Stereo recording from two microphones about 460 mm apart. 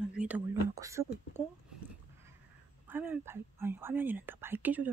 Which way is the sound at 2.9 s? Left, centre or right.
Centre.